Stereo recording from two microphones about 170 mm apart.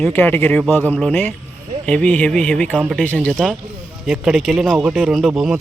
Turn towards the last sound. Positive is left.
turn(degrees=-5)  # may be behind; listen again after turning